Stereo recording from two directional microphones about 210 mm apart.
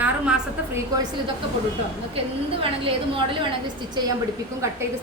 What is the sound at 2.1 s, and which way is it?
Speech, 25° right (ahead or behind).